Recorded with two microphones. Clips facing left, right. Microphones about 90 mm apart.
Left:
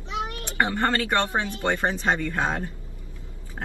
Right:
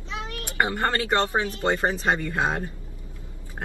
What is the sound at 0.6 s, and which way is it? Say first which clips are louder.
Speech: left 1 dB; 15° right (ahead or behind).